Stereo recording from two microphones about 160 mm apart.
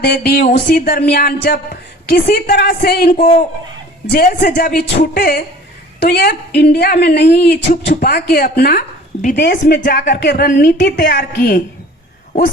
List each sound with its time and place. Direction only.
0.0 s speech: 75° left (ahead or behind)
0.4 s speech: 65° left (ahead or behind); by 5.4 s 80° left
6.0 s a woman's voice: 90° left; by 8.8 s 75° left (ahead or behind)
9.3 s a woman's voice: 90° left
11.3 s a woman's voice: 60° left (ahead or behind)